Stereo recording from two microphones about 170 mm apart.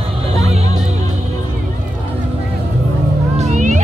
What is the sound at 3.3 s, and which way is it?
Music, 45° right (ahead or behind).